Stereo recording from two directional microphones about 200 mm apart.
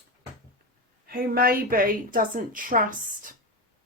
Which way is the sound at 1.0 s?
50° right (ahead or behind).